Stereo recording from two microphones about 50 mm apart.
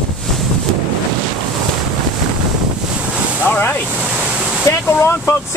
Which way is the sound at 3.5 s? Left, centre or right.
Left.